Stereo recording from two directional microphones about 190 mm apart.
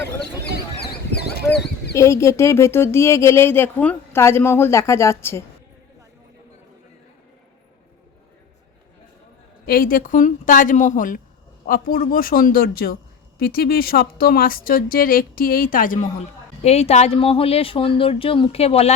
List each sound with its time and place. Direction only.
2.0 s speech: 15° left (ahead or behind)
9.6 s a woman's voice: 50° left (ahead or behind); by 18.9 s 35° left (ahead or behind)